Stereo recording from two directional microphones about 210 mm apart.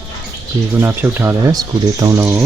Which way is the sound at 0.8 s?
10° right (ahead or behind).